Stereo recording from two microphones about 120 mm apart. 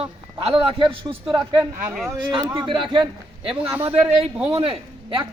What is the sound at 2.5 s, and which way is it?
Speech, 40° right (ahead or behind).